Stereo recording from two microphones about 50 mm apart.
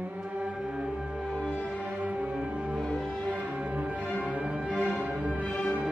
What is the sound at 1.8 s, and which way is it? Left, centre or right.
Music, right.